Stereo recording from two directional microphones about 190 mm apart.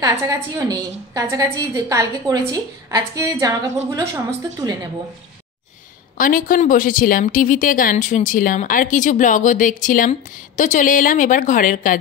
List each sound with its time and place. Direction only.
0.0 s a woman's voice: 15° right (ahead or behind)
6.1 s a woman's voice: 45° left (ahead or behind)